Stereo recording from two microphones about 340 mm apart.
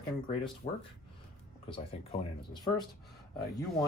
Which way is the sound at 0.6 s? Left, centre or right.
Left.